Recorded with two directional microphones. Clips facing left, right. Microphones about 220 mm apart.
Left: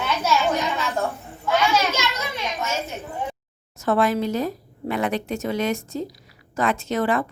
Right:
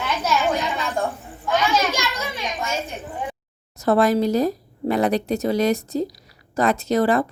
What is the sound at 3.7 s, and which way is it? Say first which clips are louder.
Speech: right 3 dB; 35° right (ahead or behind).